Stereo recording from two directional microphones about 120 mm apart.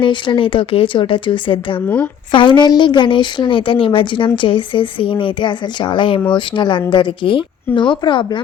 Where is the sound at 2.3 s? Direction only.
40° left (ahead or behind).